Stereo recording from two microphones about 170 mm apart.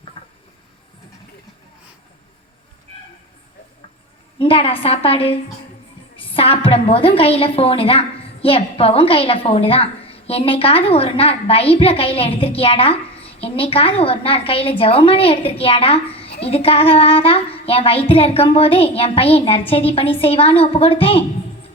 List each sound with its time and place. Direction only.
4.4 s a woman's voice: 35° left (ahead or behind)